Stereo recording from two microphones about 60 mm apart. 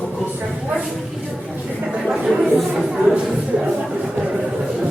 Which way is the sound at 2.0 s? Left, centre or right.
Centre.